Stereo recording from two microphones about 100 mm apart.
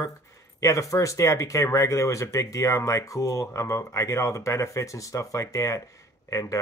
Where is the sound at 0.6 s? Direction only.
30° left (ahead or behind).